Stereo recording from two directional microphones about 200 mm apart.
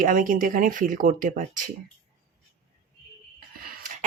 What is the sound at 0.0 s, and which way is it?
Speech, 45° right (ahead or behind).